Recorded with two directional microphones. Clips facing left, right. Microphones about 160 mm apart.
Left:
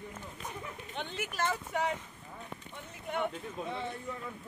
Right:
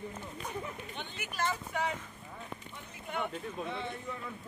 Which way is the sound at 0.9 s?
80° left.